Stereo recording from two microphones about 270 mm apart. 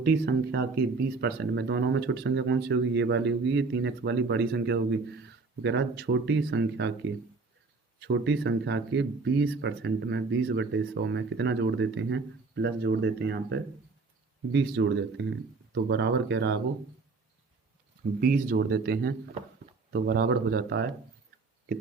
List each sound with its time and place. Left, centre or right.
0.0 s speech: right
7.9 s speech: right
18.2 s speech: right